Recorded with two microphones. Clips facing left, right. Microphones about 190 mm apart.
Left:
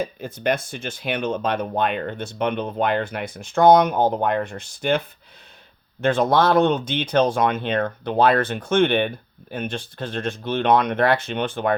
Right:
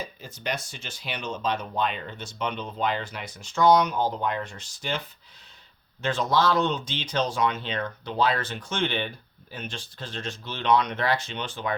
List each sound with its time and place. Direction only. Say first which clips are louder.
0.0 s speech: left 10 dB; 55° left (ahead or behind)